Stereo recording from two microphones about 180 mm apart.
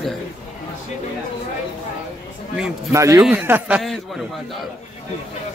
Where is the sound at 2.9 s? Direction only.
20° right (ahead or behind).